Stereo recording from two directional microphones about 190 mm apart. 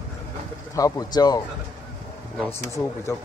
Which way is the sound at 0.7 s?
15° left (ahead or behind).